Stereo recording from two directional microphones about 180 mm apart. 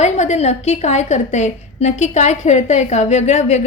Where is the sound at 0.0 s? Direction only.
40° left (ahead or behind).